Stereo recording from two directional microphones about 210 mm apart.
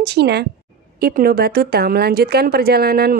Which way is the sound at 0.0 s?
50° right (ahead or behind).